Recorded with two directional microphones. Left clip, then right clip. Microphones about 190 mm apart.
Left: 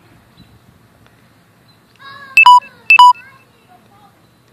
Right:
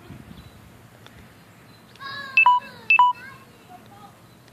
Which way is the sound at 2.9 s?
35° left (ahead or behind).